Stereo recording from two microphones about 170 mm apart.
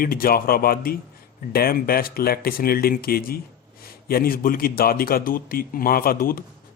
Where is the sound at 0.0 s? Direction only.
60° left (ahead or behind).